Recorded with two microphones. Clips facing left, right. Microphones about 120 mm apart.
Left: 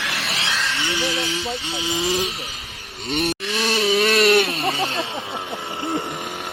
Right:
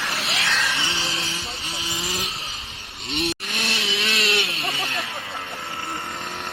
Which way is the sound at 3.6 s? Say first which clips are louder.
Left 14 dB; 50° left (ahead or behind).